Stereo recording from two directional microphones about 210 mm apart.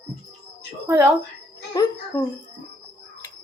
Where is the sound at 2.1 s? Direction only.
10° left (ahead or behind).